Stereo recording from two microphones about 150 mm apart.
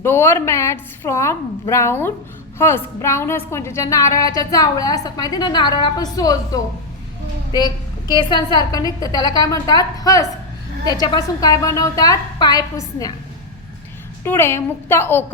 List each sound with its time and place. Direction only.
0.0 s a woman's voice: 15° left (ahead or behind)
14.3 s a woman's voice: 15° left (ahead or behind)